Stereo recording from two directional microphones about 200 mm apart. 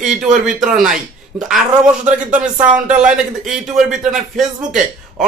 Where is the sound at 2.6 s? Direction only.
5° right (ahead or behind).